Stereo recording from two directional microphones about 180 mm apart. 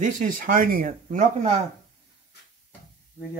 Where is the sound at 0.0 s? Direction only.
50° right (ahead or behind).